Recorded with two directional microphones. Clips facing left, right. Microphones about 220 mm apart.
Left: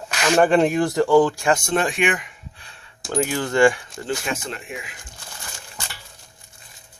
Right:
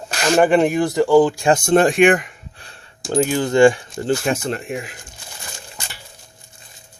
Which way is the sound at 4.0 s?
40° right (ahead or behind).